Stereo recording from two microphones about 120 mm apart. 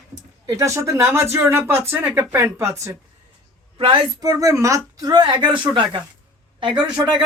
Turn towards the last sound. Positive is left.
turn(degrees=-40)  # may be behind; listen again after turning